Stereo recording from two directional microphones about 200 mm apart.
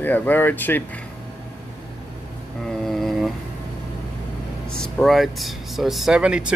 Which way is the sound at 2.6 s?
Centre (ahead or behind).